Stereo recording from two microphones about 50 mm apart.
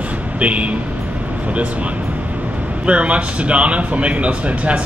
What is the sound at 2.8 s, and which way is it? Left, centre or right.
Speech, right.